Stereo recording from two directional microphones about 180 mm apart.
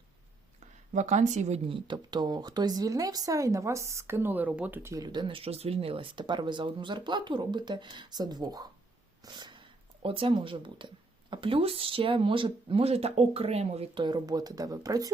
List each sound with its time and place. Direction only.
0.9 s speech: 40° right (ahead or behind); by 15.1 s 20° right (ahead or behind)